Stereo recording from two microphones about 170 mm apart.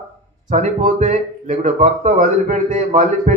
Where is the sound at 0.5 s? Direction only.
45° right (ahead or behind).